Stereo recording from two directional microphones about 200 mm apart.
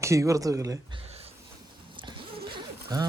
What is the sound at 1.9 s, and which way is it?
Zipper, 25° right (ahead or behind).